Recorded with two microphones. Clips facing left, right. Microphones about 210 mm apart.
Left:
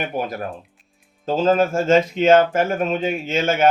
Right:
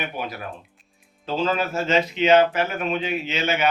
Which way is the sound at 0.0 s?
45° left (ahead or behind).